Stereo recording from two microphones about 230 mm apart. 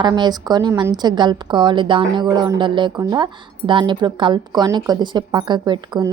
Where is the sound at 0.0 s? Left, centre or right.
Centre.